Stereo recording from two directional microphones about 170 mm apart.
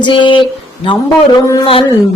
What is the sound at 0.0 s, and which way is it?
Speech, 25° left (ahead or behind).